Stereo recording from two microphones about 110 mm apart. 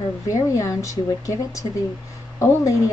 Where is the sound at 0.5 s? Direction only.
30° left (ahead or behind).